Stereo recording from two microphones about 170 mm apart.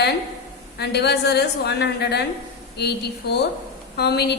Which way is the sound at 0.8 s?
75° left (ahead or behind).